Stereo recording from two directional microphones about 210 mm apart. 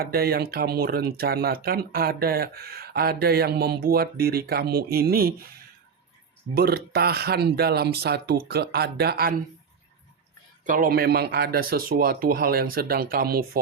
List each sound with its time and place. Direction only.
0.0 s speech: 45° right (ahead or behind)
6.5 s speech: 50° right (ahead or behind)
10.7 s speech: 40° right (ahead or behind)